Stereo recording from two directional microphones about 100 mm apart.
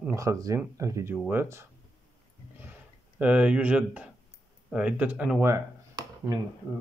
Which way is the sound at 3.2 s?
15° right (ahead or behind).